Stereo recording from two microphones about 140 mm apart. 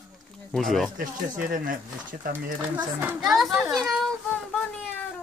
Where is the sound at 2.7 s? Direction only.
15° right (ahead or behind).